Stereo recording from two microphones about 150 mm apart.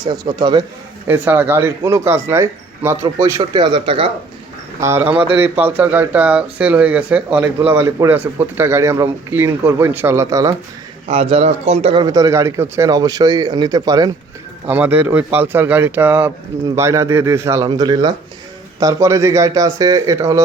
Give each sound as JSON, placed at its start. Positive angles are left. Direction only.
{"t": 0.0, "sound": "speech", "side_deg": -30}
{"t": 1.0, "sound": "speech", "side_deg": -15}
{"t": 4.8, "sound": "speech", "side_deg": -20}
{"t": 11.1, "sound": "a man's voice", "side_deg": -40}
{"t": 12.0, "sound": "speech", "side_deg": -20}
{"t": 14.7, "sound": "speech", "side_deg": -10}